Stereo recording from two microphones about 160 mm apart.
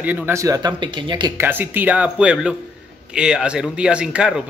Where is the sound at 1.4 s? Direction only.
10° right (ahead or behind).